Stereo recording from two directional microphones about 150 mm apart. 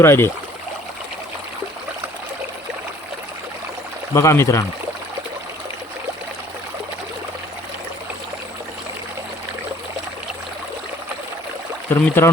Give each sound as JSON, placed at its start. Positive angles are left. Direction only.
{"t": 0.0, "sound": "speech", "side_deg": 15}
{"t": 4.1, "sound": "speech", "side_deg": 20}
{"t": 11.9, "sound": "speech", "side_deg": 15}